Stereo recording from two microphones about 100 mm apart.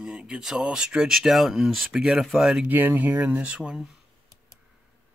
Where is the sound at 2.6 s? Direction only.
20° right (ahead or behind).